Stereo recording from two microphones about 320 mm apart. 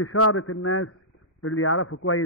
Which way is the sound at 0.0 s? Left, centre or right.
Left.